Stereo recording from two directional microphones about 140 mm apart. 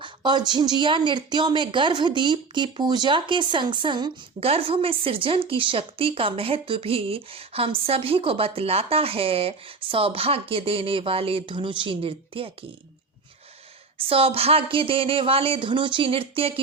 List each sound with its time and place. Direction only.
0.0 s speech: 35° right (ahead or behind)
14.1 s speech: 40° right (ahead or behind)